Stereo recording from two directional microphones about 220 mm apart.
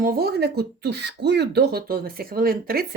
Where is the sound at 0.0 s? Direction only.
45° right (ahead or behind).